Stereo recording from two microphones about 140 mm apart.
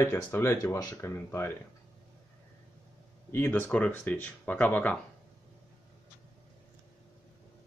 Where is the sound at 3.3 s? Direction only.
15° left (ahead or behind).